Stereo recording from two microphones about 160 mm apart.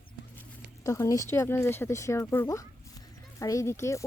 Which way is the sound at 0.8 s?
20° left (ahead or behind).